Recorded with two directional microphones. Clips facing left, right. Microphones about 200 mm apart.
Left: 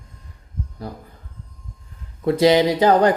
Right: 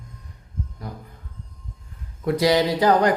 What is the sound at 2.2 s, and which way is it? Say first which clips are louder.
Mantra: left 4 dB; 25° left (ahead or behind).